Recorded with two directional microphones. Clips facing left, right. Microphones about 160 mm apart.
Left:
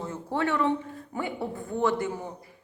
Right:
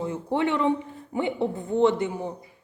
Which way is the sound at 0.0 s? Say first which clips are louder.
Right 4 dB; 15° right (ahead or behind).